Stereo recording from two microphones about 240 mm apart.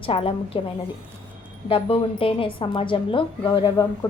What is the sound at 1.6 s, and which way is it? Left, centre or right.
A woman's voice, left.